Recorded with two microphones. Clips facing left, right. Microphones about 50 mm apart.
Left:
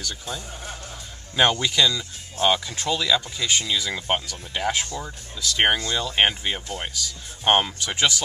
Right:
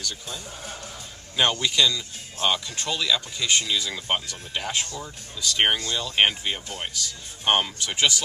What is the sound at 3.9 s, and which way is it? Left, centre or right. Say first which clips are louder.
Speech: left 2 dB; left.